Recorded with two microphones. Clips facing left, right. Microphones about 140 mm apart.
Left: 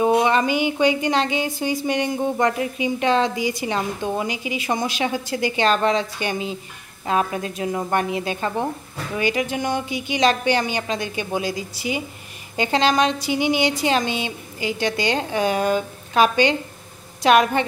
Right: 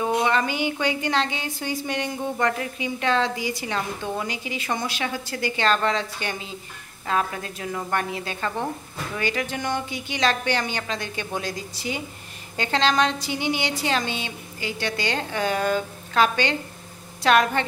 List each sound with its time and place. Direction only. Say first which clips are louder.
0.0 s a woman's voice: left 5 dB; 20° left (ahead or behind)